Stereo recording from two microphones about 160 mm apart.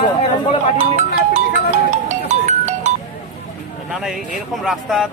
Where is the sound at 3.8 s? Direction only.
Centre (ahead or behind).